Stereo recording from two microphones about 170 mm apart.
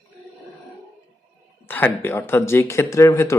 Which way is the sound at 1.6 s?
10° left (ahead or behind).